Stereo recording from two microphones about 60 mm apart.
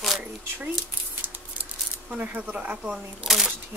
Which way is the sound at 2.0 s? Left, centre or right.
Right.